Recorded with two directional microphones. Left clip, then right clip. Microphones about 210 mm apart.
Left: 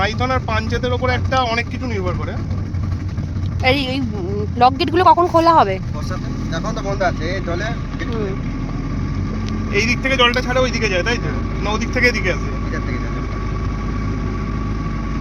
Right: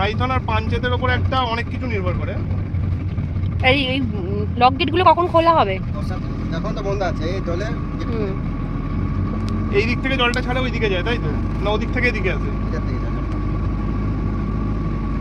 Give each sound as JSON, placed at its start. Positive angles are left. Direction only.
{"t": 0.0, "sound": "speech", "side_deg": 55}
{"t": 3.6, "sound": "speech", "side_deg": 20}
{"t": 6.5, "sound": "speech", "side_deg": 35}
{"t": 9.7, "sound": "speech", "side_deg": 55}